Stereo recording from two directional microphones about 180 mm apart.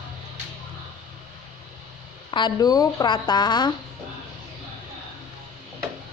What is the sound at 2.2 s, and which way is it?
Speech, 25° left (ahead or behind).